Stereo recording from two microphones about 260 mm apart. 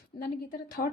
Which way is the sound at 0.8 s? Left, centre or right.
Left.